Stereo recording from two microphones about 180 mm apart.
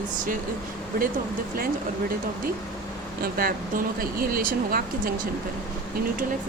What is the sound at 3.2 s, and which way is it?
Speech, 55° right (ahead or behind).